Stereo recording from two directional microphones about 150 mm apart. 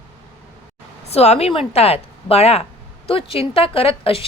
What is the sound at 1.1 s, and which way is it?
A woman's voice, 45° left (ahead or behind).